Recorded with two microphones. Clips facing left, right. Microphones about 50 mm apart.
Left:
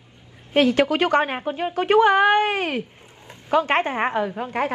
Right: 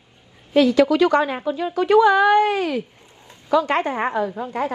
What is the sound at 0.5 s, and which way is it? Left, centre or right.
A woman's voice, left.